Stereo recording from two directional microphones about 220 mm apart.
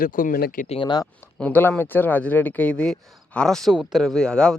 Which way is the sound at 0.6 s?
25° left (ahead or behind).